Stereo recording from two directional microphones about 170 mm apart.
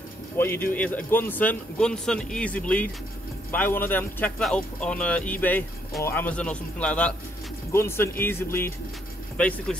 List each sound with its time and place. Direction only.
0.4 s a man's voice: 15° left (ahead or behind)